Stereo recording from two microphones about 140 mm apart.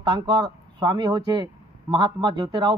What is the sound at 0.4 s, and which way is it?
Speech, 30° right (ahead or behind).